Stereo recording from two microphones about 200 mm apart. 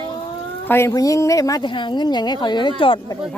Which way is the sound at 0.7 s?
15° left (ahead or behind).